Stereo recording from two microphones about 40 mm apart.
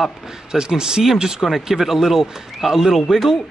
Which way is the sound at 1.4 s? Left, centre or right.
Centre.